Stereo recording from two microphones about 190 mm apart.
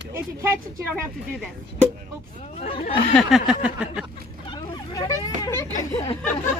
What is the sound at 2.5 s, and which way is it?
Speech, 35° left (ahead or behind).